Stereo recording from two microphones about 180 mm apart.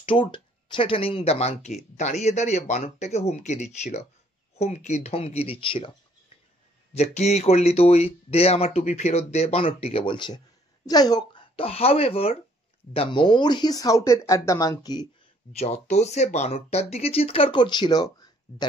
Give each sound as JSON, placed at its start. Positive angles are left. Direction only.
{"t": 0.0, "sound": "speech", "side_deg": 30}
{"t": 6.9, "sound": "speech", "side_deg": 35}
{"t": 15.5, "sound": "speech", "side_deg": 35}